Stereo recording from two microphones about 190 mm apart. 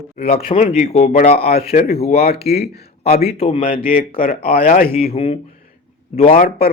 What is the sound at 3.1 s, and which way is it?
Speech, 30° left (ahead or behind).